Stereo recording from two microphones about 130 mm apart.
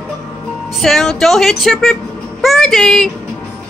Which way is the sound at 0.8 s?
5° left (ahead or behind).